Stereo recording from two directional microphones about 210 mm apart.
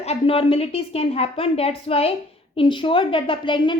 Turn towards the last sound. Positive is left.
turn(degrees=20)  # may be behind; listen again after turning